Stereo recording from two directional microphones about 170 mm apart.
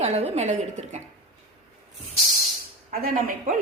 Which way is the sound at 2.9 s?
55° right (ahead or behind).